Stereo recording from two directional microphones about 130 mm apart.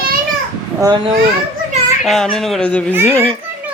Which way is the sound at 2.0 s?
Centre (ahead or behind).